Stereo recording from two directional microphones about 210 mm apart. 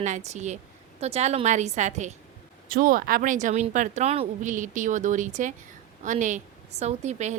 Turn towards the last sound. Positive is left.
turn(degrees=-35)  # may be behind; listen again after turning